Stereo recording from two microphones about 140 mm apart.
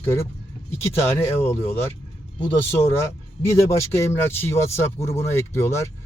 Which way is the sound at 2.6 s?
20° left (ahead or behind).